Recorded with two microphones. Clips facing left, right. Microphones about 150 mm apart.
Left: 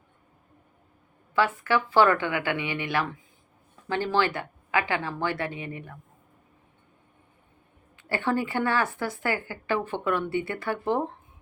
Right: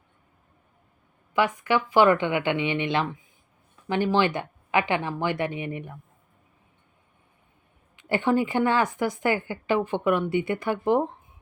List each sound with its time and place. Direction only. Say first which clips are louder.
1.3 s a woman's voice: right 1 dB; 15° right (ahead or behind)
7.9 s a woman's voice: right 4 dB; 20° right (ahead or behind)